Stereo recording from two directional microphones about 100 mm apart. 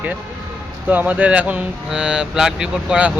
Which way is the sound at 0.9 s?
15° right (ahead or behind).